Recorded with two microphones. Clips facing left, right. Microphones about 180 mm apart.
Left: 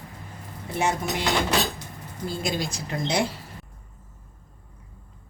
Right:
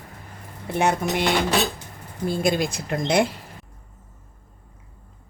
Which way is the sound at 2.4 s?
55° right (ahead or behind).